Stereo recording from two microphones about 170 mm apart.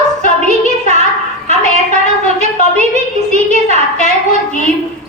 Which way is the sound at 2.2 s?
40° right (ahead or behind).